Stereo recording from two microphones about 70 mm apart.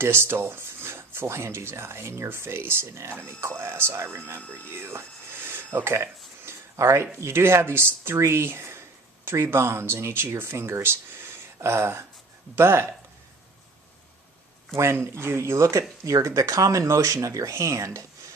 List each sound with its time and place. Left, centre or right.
0.0 s speech: right
4.7 s a sound: right
7.2 s speech: right
14.8 s speech: right
16.0 s speech: right